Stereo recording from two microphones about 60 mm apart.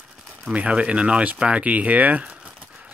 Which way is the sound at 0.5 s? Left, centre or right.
Centre.